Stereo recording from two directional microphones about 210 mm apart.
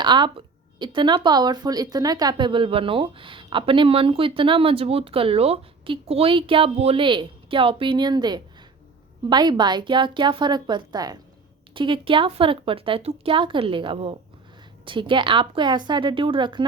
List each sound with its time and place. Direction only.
0.0 s speech: 20° right (ahead or behind)